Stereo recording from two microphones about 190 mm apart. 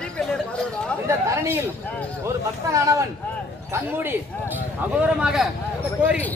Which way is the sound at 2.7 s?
15° right (ahead or behind).